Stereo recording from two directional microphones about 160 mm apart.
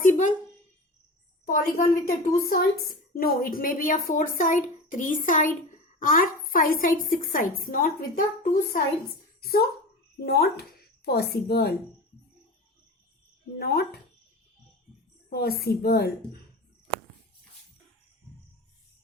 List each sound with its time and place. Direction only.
0.0 s a sound: 55° left (ahead or behind)
1.5 s a woman's voice: 60° left (ahead or behind)
9.4 s speech: 75° left (ahead or behind)
13.6 s a woman's voice: 75° left (ahead or behind)
15.3 s a woman's voice: 75° left (ahead or behind)